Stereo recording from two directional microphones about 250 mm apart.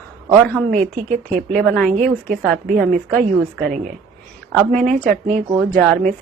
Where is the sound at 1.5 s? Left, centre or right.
Centre.